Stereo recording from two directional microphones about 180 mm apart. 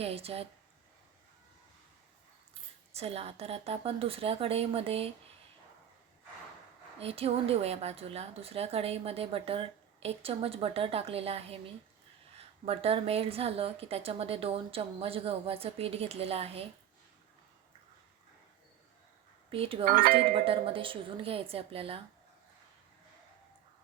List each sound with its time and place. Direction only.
0.0 s a woman's voice: 35° right (ahead or behind)
2.9 s a woman's voice: 35° right (ahead or behind)
7.0 s a woman's voice: 35° right (ahead or behind)
19.5 s a woman's voice: 30° right (ahead or behind)
19.8 s speech: 55° right (ahead or behind)
20.3 s a woman's voice: 30° right (ahead or behind)